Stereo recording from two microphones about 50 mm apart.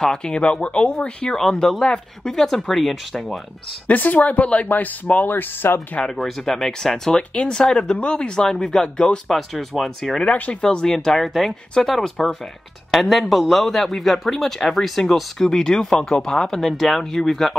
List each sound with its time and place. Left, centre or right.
0.0 s speech: centre
1.3 s a man's voice: centre
3.8 s speech: left
6.0 s a man's voice: centre
7.1 s speech: left
9.3 s a man's voice: centre
10.5 s a man's voice: centre